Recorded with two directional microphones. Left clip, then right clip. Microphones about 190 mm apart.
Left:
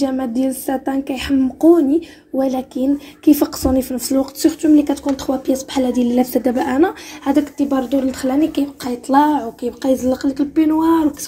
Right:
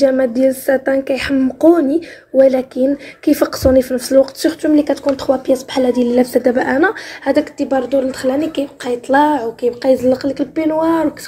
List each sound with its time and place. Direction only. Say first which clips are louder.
0.0 s a woman's voice: right 8 dB; 20° left (ahead or behind)